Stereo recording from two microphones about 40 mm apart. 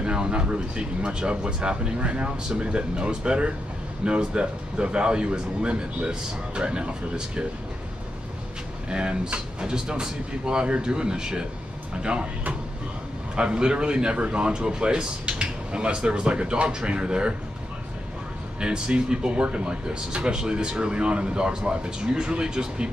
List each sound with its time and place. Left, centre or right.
0.0 s speech: right
8.8 s speech: right
13.4 s speech: right
18.6 s speech: right